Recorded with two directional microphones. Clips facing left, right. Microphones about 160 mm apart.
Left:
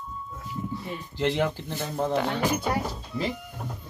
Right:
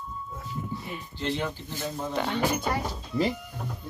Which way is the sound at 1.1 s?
90° left.